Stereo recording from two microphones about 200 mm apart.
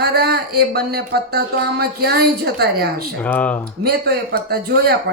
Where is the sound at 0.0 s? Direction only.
50° right (ahead or behind).